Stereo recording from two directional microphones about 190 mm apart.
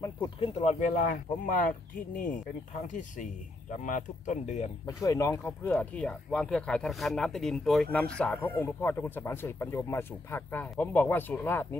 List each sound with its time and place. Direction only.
0.0 s speech: 20° left (ahead or behind)
0.6 s speech: 40° left (ahead or behind)
4.8 s speech: 15° left (ahead or behind)